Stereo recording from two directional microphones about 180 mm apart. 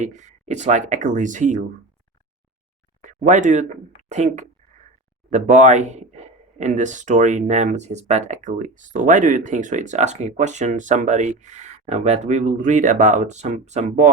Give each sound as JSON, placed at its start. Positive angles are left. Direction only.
{"t": 0.0, "sound": "speech", "side_deg": -40}
{"t": 3.0, "sound": "speech", "side_deg": -45}